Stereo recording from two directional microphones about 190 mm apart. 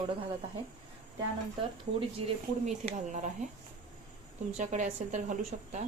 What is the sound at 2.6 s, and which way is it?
Speech, 40° right (ahead or behind).